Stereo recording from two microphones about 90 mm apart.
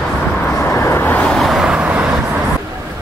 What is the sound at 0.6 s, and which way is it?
Vehicle, 30° left (ahead or behind).